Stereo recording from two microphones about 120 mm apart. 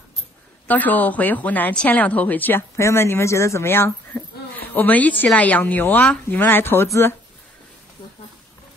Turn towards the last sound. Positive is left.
turn(degrees=20)  # may be behind; listen again after turning